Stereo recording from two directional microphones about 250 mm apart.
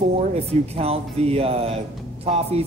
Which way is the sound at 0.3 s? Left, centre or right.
Right.